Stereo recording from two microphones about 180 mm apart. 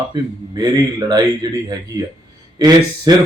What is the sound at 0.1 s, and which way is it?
Speech, 20° right (ahead or behind).